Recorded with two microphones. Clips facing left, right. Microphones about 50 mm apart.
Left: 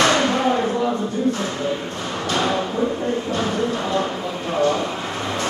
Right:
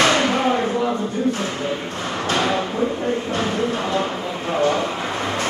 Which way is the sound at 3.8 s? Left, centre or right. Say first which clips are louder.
Even; centre.